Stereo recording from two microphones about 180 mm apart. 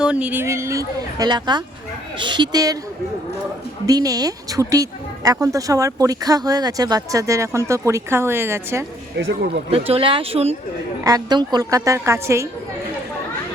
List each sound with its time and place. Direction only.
0.0 s speech: 5° right (ahead or behind)
3.8 s speech: 20° right (ahead or behind)
9.1 s a man's voice: 70° right (ahead or behind)
9.6 s speech: 30° right (ahead or behind)
11.0 s speech: 20° right (ahead or behind)